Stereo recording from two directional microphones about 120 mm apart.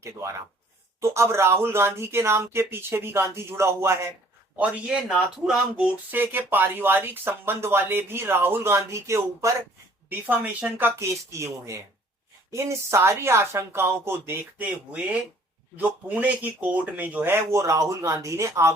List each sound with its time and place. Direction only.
0.0 s speech: 25° right (ahead or behind)
4.5 s speech: 10° right (ahead or behind)